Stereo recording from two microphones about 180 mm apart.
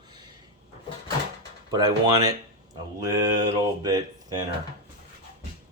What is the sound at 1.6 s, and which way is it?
Speech, 20° right (ahead or behind).